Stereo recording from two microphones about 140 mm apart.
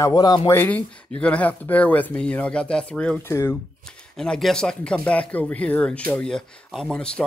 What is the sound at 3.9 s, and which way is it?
Speech, 5° left (ahead or behind).